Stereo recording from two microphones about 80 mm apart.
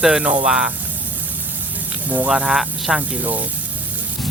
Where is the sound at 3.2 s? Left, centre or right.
Right.